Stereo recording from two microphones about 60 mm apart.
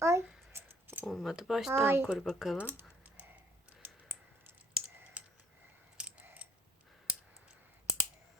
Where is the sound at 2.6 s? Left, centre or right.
Right.